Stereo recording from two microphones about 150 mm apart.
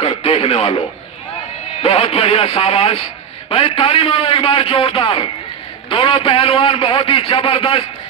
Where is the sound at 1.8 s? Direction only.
40° left (ahead or behind).